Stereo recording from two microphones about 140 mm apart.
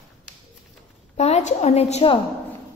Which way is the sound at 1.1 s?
55° left (ahead or behind).